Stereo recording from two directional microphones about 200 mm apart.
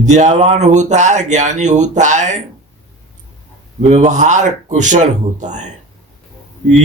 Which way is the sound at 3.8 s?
35° right (ahead or behind).